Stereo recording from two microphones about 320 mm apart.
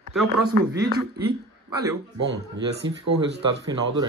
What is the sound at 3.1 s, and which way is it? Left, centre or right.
Speech, right.